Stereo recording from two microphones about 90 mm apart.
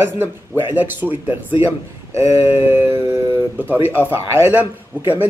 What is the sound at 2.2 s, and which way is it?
Speech, 30° right (ahead or behind).